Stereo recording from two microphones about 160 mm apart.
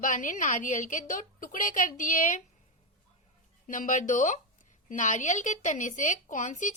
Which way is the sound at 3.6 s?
55° left (ahead or behind).